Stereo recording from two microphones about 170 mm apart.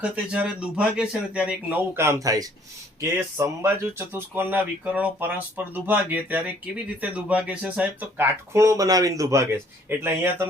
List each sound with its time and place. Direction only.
0.0 s speech: 5° right (ahead or behind)